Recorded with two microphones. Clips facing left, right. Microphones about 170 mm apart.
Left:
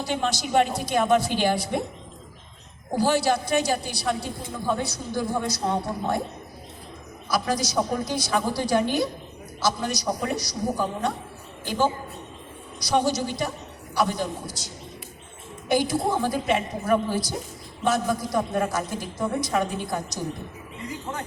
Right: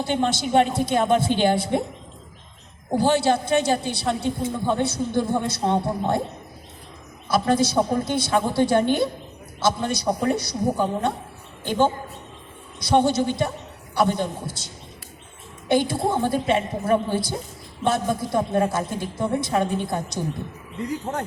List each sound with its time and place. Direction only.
0.0 s a woman's voice: 25° right (ahead or behind)
3.0 s a woman's voice: 25° right (ahead or behind)
7.3 s a woman's voice: 25° right (ahead or behind)
12.8 s a woman's voice: 25° right (ahead or behind)
15.7 s a woman's voice: 25° right (ahead or behind)